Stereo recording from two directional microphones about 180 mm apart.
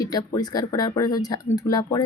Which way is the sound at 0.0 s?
20° left (ahead or behind).